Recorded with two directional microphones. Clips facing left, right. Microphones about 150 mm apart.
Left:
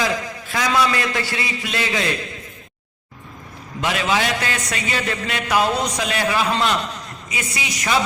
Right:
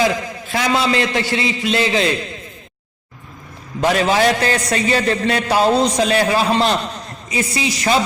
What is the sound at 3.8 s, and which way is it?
A man's voice, 40° right (ahead or behind).